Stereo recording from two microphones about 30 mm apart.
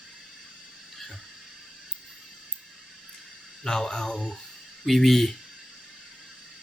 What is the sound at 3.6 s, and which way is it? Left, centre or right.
Speech, left.